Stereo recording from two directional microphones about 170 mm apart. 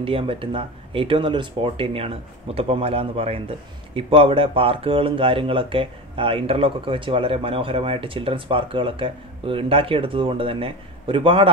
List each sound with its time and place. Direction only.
0.0 s speech: 30° right (ahead or behind)